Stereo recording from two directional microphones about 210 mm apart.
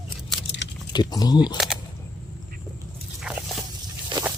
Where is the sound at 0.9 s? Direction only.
20° left (ahead or behind).